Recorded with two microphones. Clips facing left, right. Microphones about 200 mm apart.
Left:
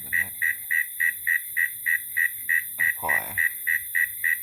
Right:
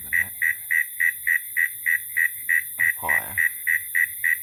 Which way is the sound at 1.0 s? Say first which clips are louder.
Right 2 dB; 30° left (ahead or behind).